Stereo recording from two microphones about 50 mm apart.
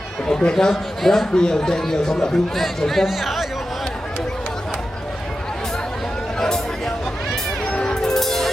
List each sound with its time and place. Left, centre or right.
0.3 s speech: centre
0.7 s speech: centre
6.4 s a sound: centre
7.7 s music: centre